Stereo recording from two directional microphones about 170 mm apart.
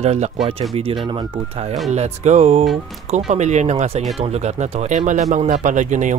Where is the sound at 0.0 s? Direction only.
40° right (ahead or behind).